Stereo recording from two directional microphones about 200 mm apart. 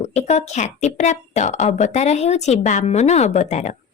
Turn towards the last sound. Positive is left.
turn(degrees=35)  # may be behind; listen again after turning